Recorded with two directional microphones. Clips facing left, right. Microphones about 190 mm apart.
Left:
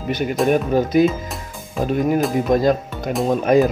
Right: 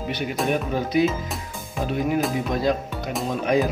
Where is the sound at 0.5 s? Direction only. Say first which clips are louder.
Left 7 dB; 45° left (ahead or behind).